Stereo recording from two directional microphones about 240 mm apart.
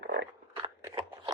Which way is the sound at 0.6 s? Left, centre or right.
Centre.